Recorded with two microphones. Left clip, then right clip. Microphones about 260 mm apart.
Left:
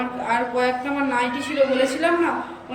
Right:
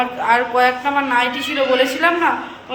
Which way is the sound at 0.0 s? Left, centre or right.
Centre.